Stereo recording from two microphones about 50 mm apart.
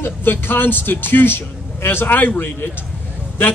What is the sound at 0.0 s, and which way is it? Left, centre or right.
A man's voice, left.